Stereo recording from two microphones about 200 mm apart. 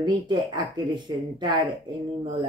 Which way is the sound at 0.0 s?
20° right (ahead or behind).